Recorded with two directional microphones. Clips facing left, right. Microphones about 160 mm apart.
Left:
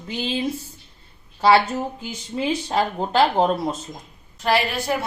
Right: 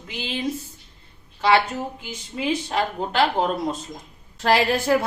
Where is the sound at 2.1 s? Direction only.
30° left (ahead or behind).